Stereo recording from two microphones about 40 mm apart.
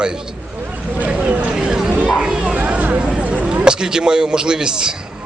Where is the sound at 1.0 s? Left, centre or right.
Right.